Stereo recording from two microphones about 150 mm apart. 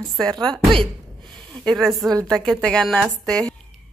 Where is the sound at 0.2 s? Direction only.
5° left (ahead or behind).